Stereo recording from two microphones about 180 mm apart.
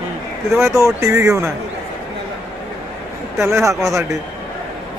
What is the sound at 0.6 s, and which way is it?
Speech, 15° right (ahead or behind).